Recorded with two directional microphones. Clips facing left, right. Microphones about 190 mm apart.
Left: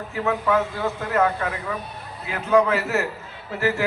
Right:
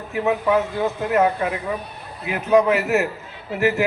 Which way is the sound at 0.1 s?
20° right (ahead or behind).